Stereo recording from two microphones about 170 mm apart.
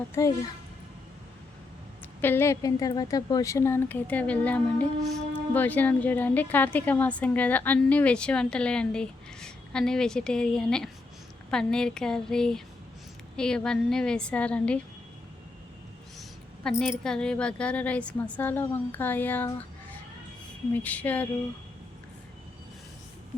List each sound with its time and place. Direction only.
0.1 s a woman's voice: 20° left (ahead or behind)
2.2 s a woman's voice: 15° left (ahead or behind)
16.8 s a woman's voice: 5° left (ahead or behind)
20.8 s a woman's voice: 10° left (ahead or behind)